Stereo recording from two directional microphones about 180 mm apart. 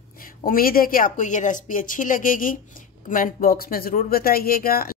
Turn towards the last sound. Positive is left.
turn(degrees=55)  # may be behind; listen again after turning